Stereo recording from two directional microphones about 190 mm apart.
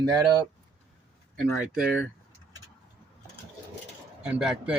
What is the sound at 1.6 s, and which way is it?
Speech, 5° right (ahead or behind).